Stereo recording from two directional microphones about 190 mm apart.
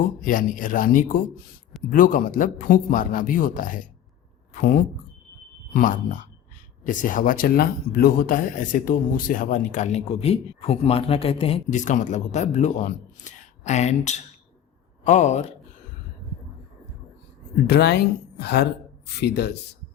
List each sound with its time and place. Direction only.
0.0 s a man's voice: 45° left (ahead or behind)
17.7 s a woman's voice: 60° left (ahead or behind)